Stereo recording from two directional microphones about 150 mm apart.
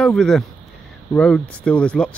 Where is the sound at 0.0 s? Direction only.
5° left (ahead or behind).